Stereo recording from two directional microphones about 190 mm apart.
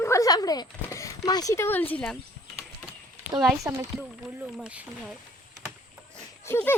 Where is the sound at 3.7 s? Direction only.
15° right (ahead or behind).